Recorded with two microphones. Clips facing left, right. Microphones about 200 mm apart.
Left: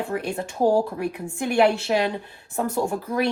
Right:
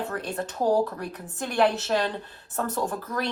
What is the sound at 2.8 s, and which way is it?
Speech, 25° left (ahead or behind).